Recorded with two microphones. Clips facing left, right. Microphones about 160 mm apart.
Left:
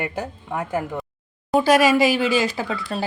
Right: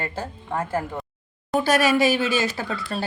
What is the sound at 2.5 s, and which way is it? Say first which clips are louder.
Speech: left 2 dB; 15° left (ahead or behind).